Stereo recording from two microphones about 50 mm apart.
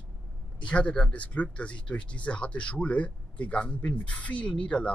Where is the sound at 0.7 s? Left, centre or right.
Left.